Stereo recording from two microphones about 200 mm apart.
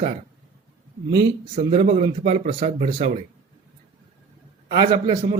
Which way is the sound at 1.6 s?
30° right (ahead or behind).